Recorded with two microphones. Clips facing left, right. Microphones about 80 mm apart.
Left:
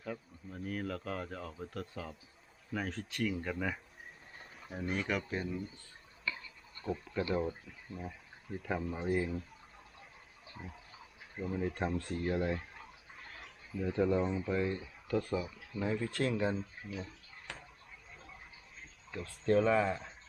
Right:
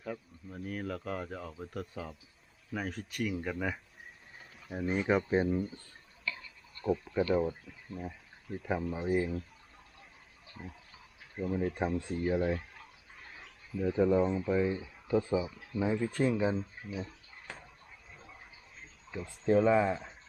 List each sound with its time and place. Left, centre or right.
0.0 s speech: centre
5.0 s speech: right
7.0 s speech: centre
10.5 s a sound: centre
11.3 s speech: centre
19.1 s speech: centre